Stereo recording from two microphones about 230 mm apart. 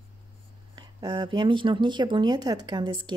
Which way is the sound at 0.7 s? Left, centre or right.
Centre.